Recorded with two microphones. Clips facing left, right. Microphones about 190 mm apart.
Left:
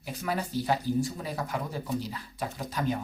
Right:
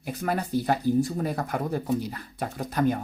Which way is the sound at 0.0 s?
55° right (ahead or behind).